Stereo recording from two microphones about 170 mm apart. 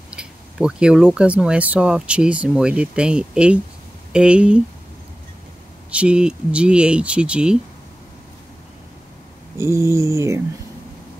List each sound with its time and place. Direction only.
0.1 s speech: 5° right (ahead or behind)
5.9 s speech: 5° right (ahead or behind)
9.6 s speech: 15° right (ahead or behind)